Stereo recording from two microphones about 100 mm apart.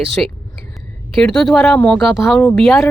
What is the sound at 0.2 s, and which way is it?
Speech, 15° left (ahead or behind).